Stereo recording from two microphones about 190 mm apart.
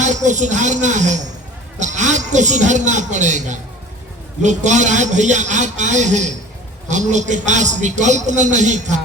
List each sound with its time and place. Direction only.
0.0 s a man's voice: 40° right (ahead or behind)